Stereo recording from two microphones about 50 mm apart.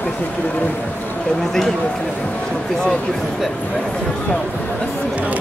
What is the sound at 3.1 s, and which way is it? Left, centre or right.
Speech, centre.